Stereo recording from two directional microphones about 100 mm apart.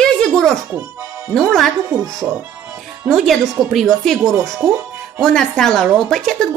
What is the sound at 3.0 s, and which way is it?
Speech, centre (ahead or behind).